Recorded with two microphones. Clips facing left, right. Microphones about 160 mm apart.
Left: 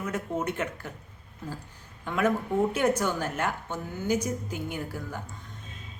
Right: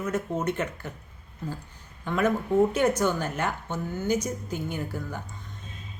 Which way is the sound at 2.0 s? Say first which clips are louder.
Right 1 dB; 5° left (ahead or behind).